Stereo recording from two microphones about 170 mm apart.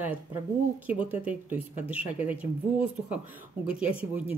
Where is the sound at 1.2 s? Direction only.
10° right (ahead or behind).